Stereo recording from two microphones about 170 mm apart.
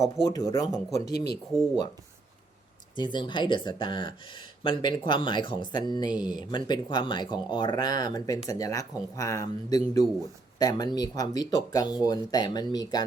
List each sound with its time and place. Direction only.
0.0 s speech: 20° left (ahead or behind)
1.1 s speech: 70° left (ahead or behind)
2.9 s speech: 25° left (ahead or behind)